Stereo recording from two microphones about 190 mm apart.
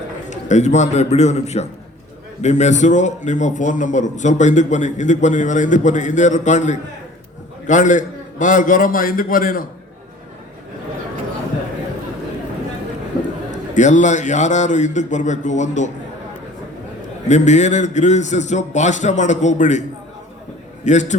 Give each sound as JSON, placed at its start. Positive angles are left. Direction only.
{"t": 0.3, "sound": "a man's voice", "side_deg": 40}
{"t": 13.5, "sound": "a man's voice", "side_deg": 40}
{"t": 17.2, "sound": "a man's voice", "side_deg": 40}
{"t": 20.8, "sound": "a man's voice", "side_deg": 40}